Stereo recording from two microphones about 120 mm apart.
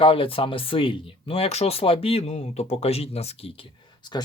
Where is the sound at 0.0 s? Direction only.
50° left (ahead or behind).